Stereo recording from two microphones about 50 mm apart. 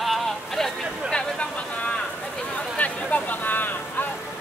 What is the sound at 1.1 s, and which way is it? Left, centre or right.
Speech, left.